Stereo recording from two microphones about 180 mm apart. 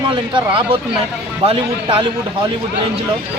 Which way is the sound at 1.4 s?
30° right (ahead or behind).